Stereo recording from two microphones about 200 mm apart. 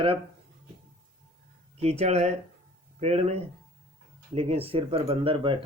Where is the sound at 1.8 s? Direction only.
30° right (ahead or behind).